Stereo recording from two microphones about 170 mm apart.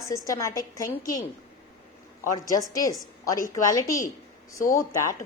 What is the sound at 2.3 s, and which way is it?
A woman's voice, 20° left (ahead or behind).